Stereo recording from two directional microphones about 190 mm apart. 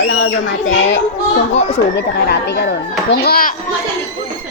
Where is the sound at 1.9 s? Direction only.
60° left (ahead or behind).